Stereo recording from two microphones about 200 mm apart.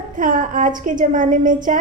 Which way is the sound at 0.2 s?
40° right (ahead or behind).